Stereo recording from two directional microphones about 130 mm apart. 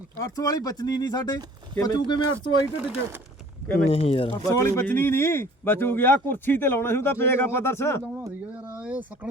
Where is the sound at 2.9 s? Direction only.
15° right (ahead or behind).